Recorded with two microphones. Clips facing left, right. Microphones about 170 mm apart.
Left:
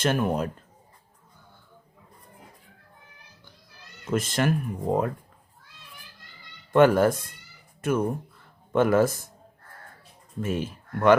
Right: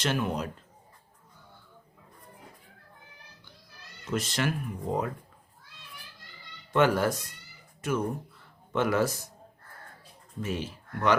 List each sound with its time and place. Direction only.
0.0 s speech: 50° left (ahead or behind)
4.1 s speech: 50° left (ahead or behind)
6.7 s speech: 50° left (ahead or behind)
10.4 s speech: 50° left (ahead or behind)